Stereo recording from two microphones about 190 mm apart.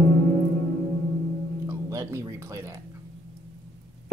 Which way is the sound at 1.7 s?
15° right (ahead or behind).